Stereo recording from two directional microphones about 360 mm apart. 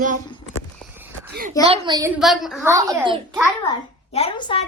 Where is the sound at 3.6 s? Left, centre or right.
Centre.